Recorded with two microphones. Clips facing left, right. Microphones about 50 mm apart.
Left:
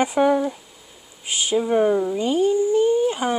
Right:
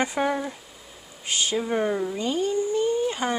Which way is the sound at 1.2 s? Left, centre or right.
Centre.